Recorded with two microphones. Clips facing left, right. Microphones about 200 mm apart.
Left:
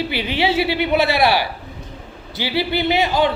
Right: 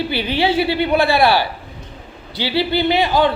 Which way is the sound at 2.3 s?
25° right (ahead or behind).